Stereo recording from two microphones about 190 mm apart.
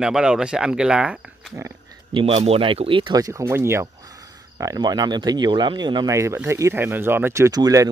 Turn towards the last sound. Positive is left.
turn(degrees=-20)  # may be behind; listen again after turning